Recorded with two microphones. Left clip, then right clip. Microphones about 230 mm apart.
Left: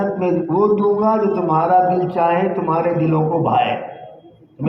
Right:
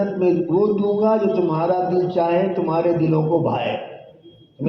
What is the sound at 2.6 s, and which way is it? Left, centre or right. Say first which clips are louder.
A man's voice: left 1 dB; left.